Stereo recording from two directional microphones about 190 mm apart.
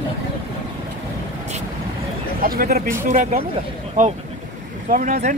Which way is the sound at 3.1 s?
40° right (ahead or behind).